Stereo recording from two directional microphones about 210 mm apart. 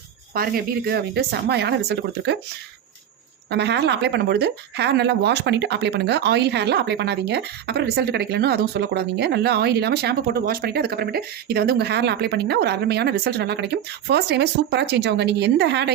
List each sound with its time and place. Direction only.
0.3 s speech: 45° right (ahead or behind)
3.5 s speech: 55° right (ahead or behind)